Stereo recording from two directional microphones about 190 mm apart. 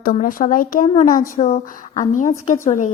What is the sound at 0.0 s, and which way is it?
A woman's voice, 45° left (ahead or behind).